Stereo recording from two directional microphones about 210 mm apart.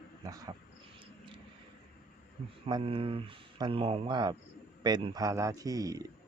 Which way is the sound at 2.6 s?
25° right (ahead or behind).